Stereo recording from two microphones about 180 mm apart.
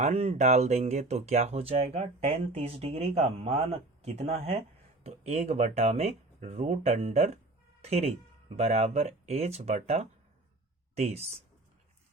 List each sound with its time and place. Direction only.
0.0 s speech: 35° right (ahead or behind)